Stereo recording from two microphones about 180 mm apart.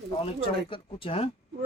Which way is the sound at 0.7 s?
30° left (ahead or behind).